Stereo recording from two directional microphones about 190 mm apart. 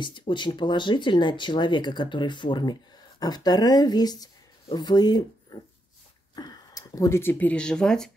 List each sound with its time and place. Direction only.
0.0 s speech: 25° left (ahead or behind); by 8.1 s 5° left (ahead or behind)